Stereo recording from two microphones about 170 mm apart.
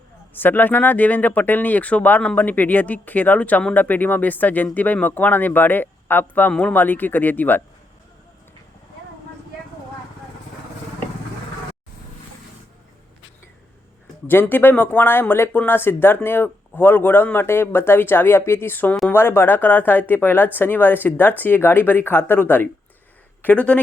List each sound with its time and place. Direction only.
0.3 s speech: 10° left (ahead or behind)
14.3 s speech: 10° left (ahead or behind)